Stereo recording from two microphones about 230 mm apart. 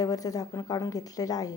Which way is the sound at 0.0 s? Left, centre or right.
Centre.